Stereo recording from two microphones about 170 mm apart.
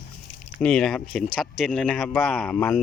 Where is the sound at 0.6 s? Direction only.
5° left (ahead or behind).